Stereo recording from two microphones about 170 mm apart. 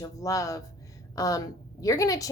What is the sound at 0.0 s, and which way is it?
Speech, 20° left (ahead or behind).